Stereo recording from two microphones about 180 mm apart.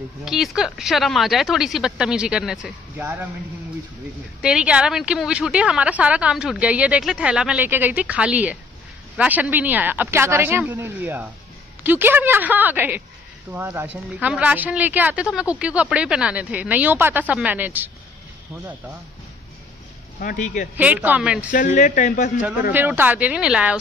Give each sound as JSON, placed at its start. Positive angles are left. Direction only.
{"t": 0.2, "sound": "speech", "side_deg": 0}
{"t": 4.4, "sound": "a woman's voice", "side_deg": -5}
{"t": 20.2, "sound": "speech", "side_deg": 45}
{"t": 20.7, "sound": "a woman's voice", "side_deg": -10}
{"t": 21.5, "sound": "speech", "side_deg": 45}
{"t": 22.7, "sound": "a woman's voice", "side_deg": -10}